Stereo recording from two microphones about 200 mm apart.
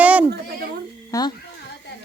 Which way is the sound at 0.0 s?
5° right (ahead or behind).